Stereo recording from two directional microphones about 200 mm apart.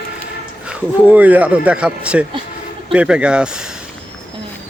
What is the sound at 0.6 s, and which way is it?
Speech, 5° right (ahead or behind).